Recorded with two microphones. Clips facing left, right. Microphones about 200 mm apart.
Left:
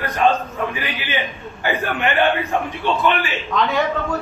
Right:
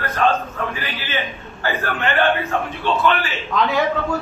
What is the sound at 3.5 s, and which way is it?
Speech, centre (ahead or behind).